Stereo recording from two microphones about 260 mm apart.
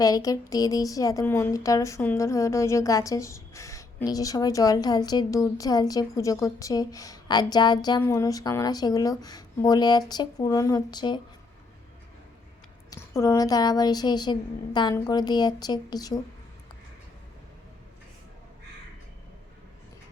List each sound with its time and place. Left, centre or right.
0.0 s speech: centre
12.9 s speech: centre